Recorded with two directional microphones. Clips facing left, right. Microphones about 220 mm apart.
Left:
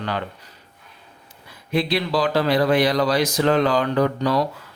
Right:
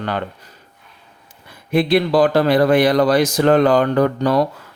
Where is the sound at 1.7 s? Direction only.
55° right (ahead or behind).